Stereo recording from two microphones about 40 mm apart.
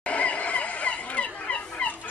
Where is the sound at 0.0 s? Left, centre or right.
Left.